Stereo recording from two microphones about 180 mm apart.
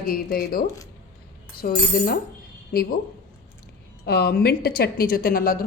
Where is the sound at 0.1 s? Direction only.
55° left (ahead or behind).